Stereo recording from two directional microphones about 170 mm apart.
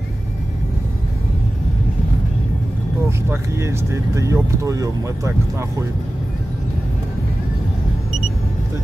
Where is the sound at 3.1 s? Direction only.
15° right (ahead or behind).